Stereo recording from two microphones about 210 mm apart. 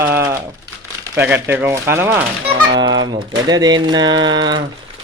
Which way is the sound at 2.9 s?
65° right (ahead or behind).